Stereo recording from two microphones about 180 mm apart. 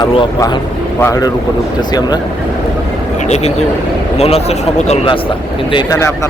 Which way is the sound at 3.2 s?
40° left (ahead or behind).